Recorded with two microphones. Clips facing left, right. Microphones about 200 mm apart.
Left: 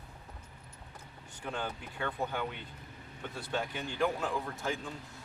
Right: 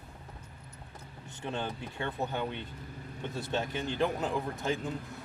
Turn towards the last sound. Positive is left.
turn(degrees=-20)  # may be behind; listen again after turning